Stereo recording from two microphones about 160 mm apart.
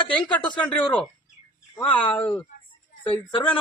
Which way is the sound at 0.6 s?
5° left (ahead or behind).